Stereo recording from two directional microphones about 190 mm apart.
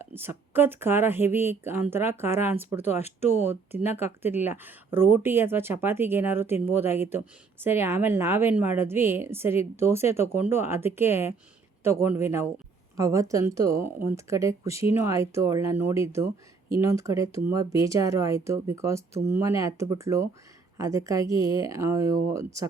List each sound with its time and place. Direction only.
0.0 s speech: 10° right (ahead or behind)